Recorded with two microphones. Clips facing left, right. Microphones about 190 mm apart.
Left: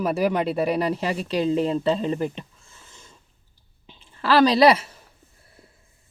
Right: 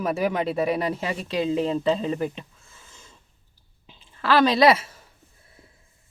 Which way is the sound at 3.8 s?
30° left (ahead or behind).